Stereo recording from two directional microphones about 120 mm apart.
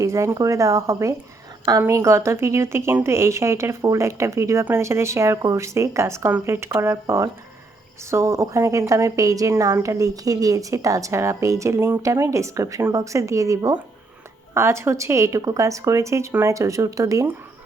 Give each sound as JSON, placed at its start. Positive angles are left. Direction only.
{"t": 0.0, "sound": "speech", "side_deg": -25}